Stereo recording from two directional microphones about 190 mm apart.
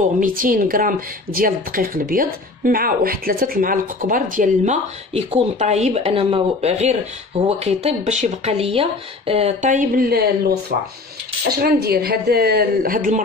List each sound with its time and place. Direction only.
0.2 s speech: 45° right (ahead or behind)
5.1 s speech: 35° right (ahead or behind); by 10.2 s 50° right (ahead or behind)
11.6 s a woman's voice: 55° right (ahead or behind)